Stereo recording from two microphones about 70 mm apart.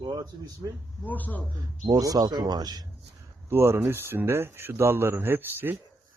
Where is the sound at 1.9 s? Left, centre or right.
Right.